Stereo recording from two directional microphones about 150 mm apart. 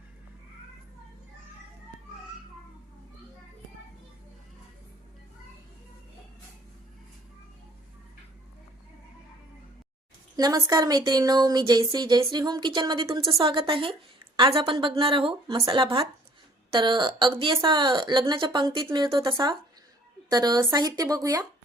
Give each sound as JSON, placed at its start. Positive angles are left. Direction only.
{"t": 10.3, "sound": "a woman's voice", "side_deg": -25}